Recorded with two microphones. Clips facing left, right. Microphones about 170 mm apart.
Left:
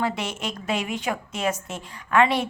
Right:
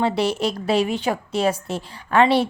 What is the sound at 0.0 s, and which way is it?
A woman's voice, 35° right (ahead or behind).